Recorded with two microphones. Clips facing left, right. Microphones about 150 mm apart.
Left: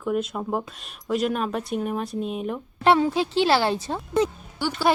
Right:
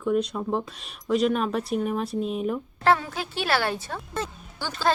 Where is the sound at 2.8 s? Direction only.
20° left (ahead or behind).